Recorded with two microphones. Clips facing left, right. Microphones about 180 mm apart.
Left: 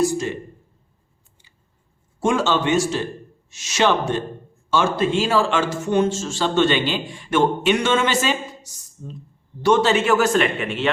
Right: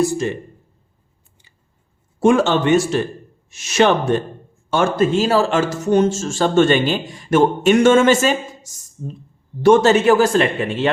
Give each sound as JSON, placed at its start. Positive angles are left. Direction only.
{"t": 0.0, "sound": "a man's voice", "side_deg": -55}
{"t": 2.2, "sound": "a man's voice", "side_deg": -55}